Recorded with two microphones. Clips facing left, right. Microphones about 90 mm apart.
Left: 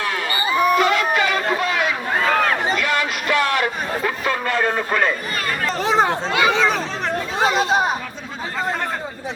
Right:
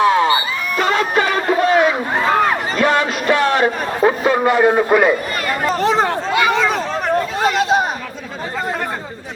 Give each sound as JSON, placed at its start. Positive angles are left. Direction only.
{"t": 0.0, "sound": "crowd", "side_deg": -25}
{"t": 0.8, "sound": "a sound", "side_deg": -35}
{"t": 2.1, "sound": "a sound", "side_deg": -10}
{"t": 2.7, "sound": "chatter", "side_deg": -30}
{"t": 4.3, "sound": "a man's voice", "side_deg": -20}
{"t": 5.6, "sound": "speech", "side_deg": 0}